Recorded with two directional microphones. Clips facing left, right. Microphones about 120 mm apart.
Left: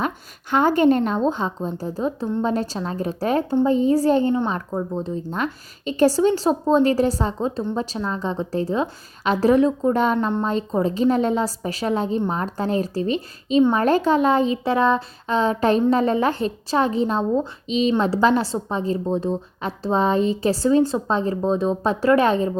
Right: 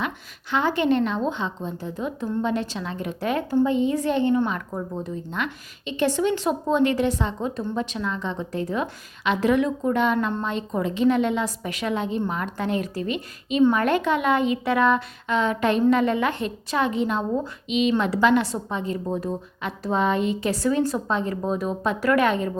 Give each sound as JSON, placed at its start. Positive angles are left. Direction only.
{"t": 0.5, "sound": "speech", "side_deg": 45}